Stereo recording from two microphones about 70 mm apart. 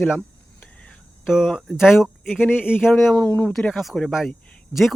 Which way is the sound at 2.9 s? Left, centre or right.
Centre.